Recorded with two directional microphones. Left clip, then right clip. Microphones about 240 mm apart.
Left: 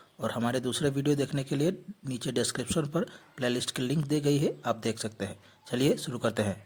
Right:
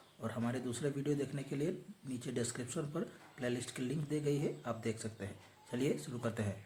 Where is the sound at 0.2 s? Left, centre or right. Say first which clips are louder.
Left 10 dB; left.